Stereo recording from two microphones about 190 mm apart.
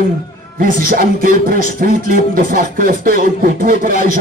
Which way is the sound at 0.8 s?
50° right (ahead or behind).